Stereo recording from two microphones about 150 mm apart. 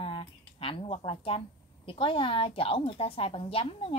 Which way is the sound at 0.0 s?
40° left (ahead or behind).